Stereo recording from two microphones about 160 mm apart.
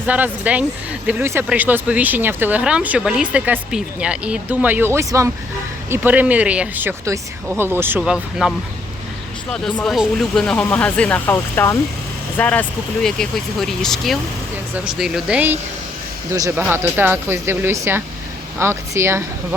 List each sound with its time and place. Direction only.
0.0 s speech: 10° right (ahead or behind)
16.3 s speech: 20° right (ahead or behind)